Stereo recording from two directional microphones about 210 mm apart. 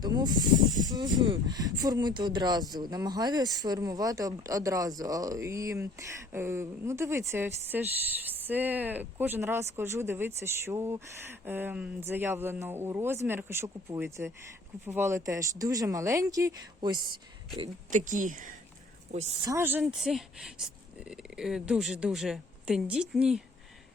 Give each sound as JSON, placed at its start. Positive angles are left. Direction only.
{"t": 0.0, "sound": "speech", "side_deg": -20}
{"t": 17.9, "sound": "a woman's voice", "side_deg": -40}
{"t": 19.5, "sound": "speech", "side_deg": -10}